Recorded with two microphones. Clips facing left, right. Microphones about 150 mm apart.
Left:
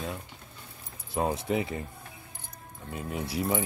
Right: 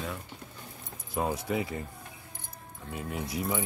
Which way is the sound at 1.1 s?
25° left (ahead or behind).